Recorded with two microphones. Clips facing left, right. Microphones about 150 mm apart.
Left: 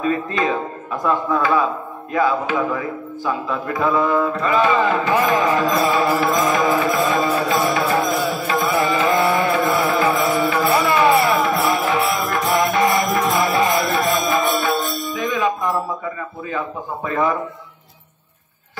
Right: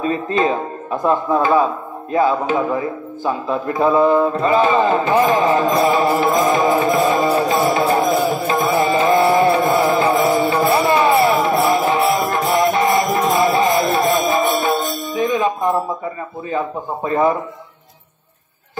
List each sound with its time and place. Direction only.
0.0 s speech: 30° right (ahead or behind)
3.8 s mantra: 30° right (ahead or behind)
8.5 s music: 25° right (ahead or behind)
16.4 s speech: 30° right (ahead or behind)